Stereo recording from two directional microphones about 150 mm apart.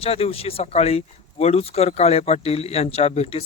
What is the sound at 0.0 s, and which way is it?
Speech, 40° left (ahead or behind).